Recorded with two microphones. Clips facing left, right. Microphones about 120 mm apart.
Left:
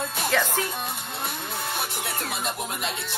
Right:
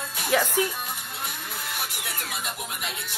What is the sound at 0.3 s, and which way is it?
Music, 10° right (ahead or behind).